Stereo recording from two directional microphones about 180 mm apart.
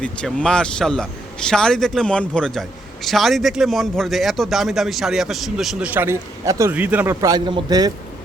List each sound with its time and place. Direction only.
0.0 s a man's voice: 5° left (ahead or behind); by 7.9 s 20° right (ahead or behind)